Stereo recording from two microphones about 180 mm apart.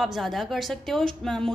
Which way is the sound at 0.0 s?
Centre (ahead or behind).